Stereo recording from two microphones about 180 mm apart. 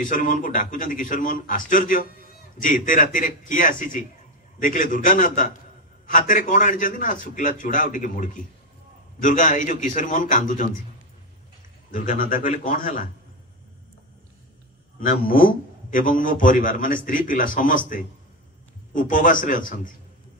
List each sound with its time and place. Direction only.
0.0 s a man's voice: 50° left (ahead or behind)
11.9 s a man's voice: 50° left (ahead or behind)
15.0 s a man's voice: 50° left (ahead or behind)